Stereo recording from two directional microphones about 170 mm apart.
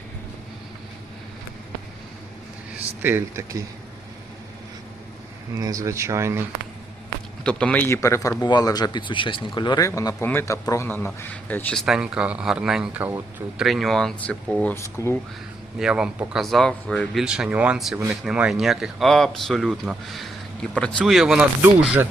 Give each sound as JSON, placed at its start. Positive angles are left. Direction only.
{"t": 3.0, "sound": "speech", "side_deg": -10}
{"t": 5.5, "sound": "speech", "side_deg": -20}
{"t": 7.4, "sound": "a man's voice", "side_deg": 10}
{"t": 15.8, "sound": "a man's voice", "side_deg": -5}